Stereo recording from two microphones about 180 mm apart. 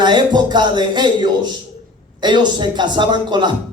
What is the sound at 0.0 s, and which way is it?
A man's voice, 25° right (ahead or behind).